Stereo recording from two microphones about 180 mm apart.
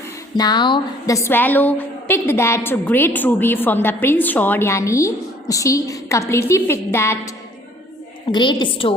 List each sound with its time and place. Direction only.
0.3 s a woman's voice: 25° left (ahead or behind)
8.3 s a woman's voice: 25° left (ahead or behind)